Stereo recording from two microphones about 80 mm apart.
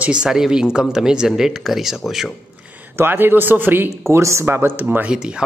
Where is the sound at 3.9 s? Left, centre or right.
Right.